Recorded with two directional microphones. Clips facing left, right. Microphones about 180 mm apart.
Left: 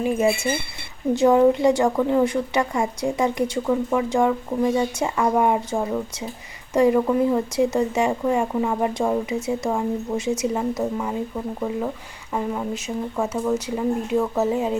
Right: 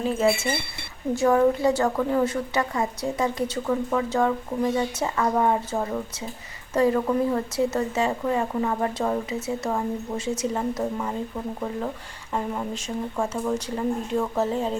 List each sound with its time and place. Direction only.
0.0 s speech: 15° left (ahead or behind)
12.3 s speech: 5° left (ahead or behind)